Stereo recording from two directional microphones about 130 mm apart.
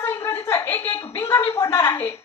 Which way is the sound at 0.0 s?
20° left (ahead or behind).